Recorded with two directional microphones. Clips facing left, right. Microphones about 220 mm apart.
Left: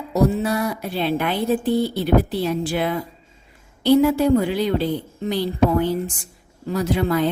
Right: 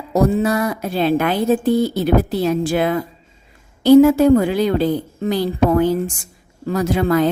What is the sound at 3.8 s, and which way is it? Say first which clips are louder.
A woman's voice: right 6 dB; 45° right (ahead or behind).